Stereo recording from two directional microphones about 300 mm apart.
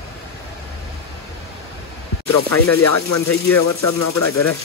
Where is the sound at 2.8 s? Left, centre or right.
Left.